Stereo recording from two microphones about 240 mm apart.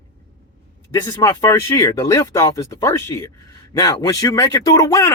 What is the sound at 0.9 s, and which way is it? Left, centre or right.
A man's voice, centre.